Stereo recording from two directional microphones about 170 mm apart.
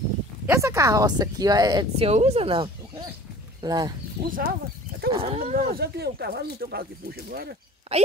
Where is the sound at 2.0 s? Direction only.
35° right (ahead or behind).